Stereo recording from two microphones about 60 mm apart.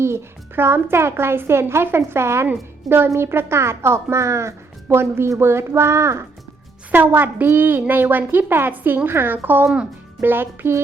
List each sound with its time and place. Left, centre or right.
0.0 s a woman's voice: right
6.9 s a woman's voice: right